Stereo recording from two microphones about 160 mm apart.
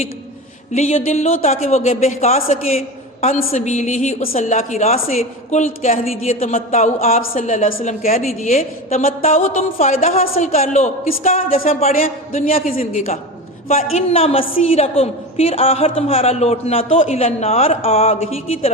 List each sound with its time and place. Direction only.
0.7 s a woman's voice: 45° left (ahead or behind)
11.5 s a woman's voice: 40° left (ahead or behind)
12.0 s a man's voice: 55° left (ahead or behind)
12.7 s a woman's voice: 45° left (ahead or behind)